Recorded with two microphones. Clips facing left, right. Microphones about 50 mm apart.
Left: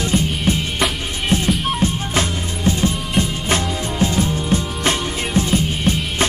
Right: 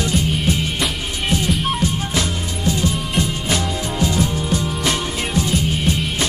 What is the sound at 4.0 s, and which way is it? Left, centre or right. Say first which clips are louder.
Music: left 1 dB; left.